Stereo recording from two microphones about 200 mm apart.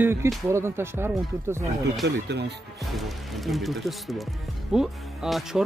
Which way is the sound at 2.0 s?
55° right (ahead or behind).